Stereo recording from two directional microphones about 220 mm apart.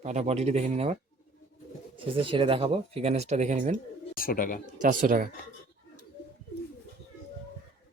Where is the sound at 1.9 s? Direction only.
25° right (ahead or behind).